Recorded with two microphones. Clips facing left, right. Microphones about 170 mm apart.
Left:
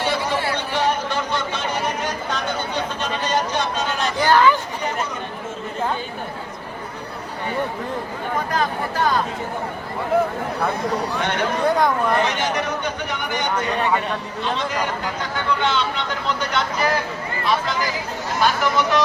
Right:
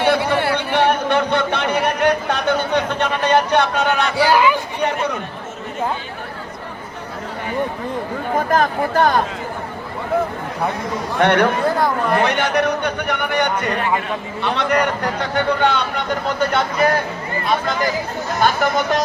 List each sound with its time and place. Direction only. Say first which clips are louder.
0.0 s a sound: right 5 dB; 60° right (ahead or behind)
4.3 s chatter: left 1 dB; 10° right (ahead or behind)
8.4 s speech: right 6 dB; 50° right (ahead or behind)
11.2 s a man's voice: right 9 dB; 65° right (ahead or behind)
15.6 s speech: right 4 dB; 50° right (ahead or behind)